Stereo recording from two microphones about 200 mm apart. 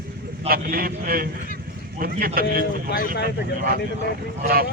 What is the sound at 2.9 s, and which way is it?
Speech, 55° left (ahead or behind).